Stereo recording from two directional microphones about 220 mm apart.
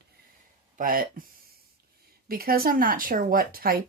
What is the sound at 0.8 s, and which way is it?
Speech, 40° right (ahead or behind).